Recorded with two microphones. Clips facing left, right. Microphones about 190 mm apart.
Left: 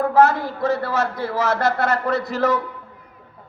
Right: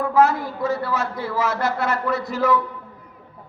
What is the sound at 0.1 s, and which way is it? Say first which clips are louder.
Speech: left 2 dB; 70° left (ahead or behind).